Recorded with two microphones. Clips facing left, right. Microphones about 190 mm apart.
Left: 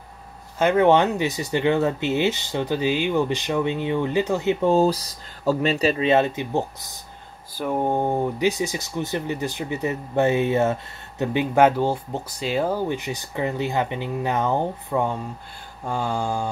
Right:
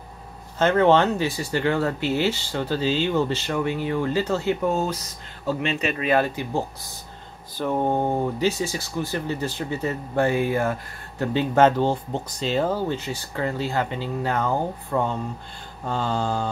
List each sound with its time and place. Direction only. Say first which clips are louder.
0.6 s speech: left 1 dB; 15° left (ahead or behind)